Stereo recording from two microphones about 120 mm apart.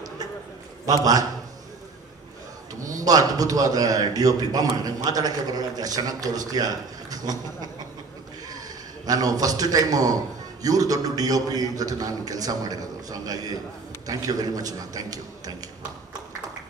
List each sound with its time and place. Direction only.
0.8 s a man's voice: 30° right (ahead or behind)
3.0 s a man's voice: 30° right (ahead or behind)